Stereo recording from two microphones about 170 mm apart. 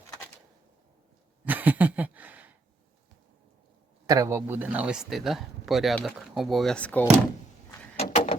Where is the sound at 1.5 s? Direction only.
10° right (ahead or behind).